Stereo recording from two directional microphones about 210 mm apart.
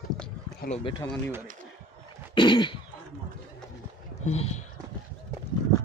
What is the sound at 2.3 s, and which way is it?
Cough, 20° left (ahead or behind).